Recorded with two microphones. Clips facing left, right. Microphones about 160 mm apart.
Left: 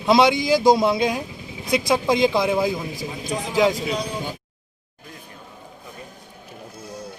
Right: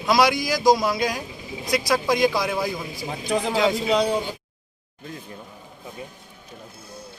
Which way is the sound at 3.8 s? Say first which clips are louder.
Right 5 dB; 70° right (ahead or behind).